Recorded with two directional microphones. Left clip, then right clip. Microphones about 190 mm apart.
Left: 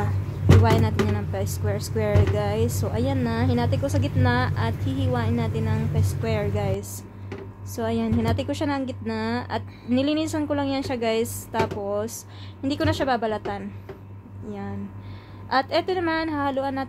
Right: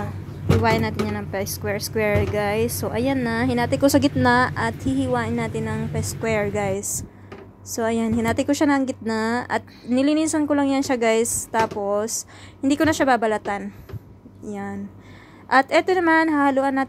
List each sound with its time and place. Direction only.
0.6 s speech: 25° right (ahead or behind)
3.8 s a woman's voice: 45° right (ahead or behind)
9.8 s a woman's voice: 25° right (ahead or behind)